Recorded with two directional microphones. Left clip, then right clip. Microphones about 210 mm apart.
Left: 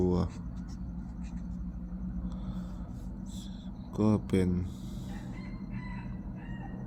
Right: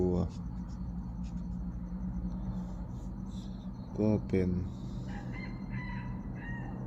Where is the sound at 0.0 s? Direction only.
25° left (ahead or behind).